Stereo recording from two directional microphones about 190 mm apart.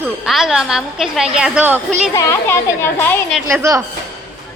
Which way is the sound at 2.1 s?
15° left (ahead or behind).